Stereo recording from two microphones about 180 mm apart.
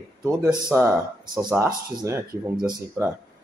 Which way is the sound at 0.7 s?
10° right (ahead or behind).